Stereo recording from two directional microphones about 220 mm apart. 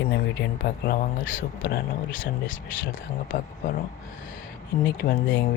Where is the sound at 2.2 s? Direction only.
60° left (ahead or behind).